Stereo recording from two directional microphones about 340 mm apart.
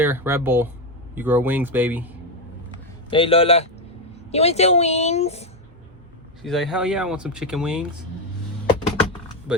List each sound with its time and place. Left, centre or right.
0.0 s speech: centre
3.1 s speech: centre
6.4 s speech: centre
9.5 s speech: centre